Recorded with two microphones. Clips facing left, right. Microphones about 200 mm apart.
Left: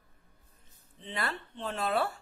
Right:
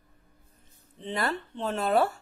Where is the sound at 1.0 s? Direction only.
40° right (ahead or behind).